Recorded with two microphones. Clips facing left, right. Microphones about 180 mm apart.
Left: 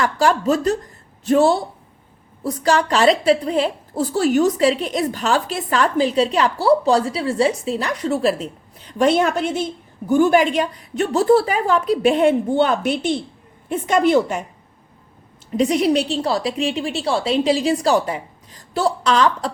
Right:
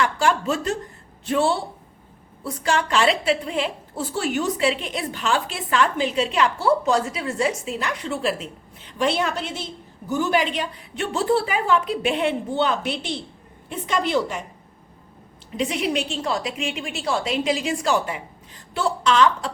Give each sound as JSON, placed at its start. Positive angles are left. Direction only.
{"t": 0.0, "sound": "a woman's voice", "side_deg": 40}
{"t": 15.5, "sound": "a woman's voice", "side_deg": 40}